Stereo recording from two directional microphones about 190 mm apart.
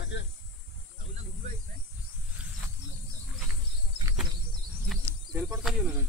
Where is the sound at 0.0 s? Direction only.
70° left (ahead or behind).